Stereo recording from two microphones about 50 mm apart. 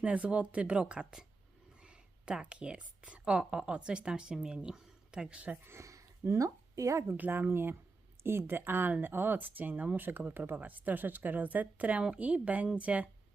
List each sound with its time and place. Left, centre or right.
0.0 s speech: right
5.6 s speech: right
7.2 s speech: right